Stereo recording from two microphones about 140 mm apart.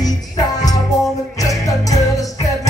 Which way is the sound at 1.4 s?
25° left (ahead or behind).